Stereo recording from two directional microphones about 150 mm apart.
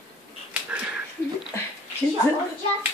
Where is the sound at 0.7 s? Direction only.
10° right (ahead or behind).